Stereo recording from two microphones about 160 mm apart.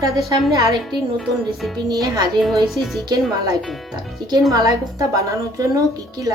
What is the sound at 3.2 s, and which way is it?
Speech, centre (ahead or behind).